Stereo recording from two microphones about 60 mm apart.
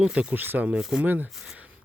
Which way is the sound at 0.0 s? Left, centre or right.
Centre.